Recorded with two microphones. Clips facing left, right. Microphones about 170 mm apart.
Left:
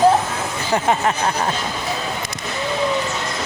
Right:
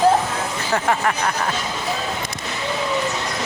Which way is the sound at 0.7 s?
20° left (ahead or behind).